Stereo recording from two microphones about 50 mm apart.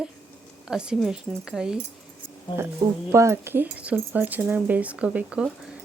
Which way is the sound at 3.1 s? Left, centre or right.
Right.